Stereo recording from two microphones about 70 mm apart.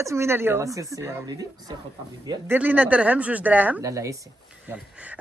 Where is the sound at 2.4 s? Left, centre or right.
Right.